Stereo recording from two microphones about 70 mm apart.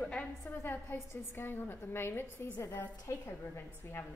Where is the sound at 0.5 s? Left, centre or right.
Left.